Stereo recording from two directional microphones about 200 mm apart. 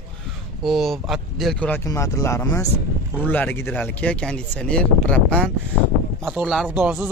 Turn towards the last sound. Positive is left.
turn(degrees=-10)  # may be behind; listen again after turning